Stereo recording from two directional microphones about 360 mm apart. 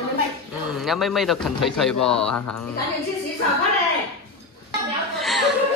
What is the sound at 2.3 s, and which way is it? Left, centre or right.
Speech, left.